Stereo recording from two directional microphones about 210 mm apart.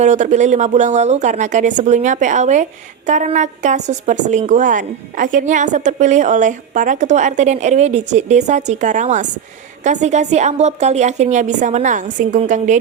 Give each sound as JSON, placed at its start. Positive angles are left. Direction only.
{"t": 0.0, "sound": "a woman's voice", "side_deg": -35}